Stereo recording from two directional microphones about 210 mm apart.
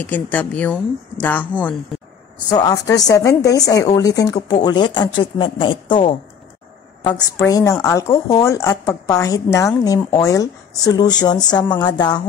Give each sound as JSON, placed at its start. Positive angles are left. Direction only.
{"t": 0.0, "sound": "speech", "side_deg": 10}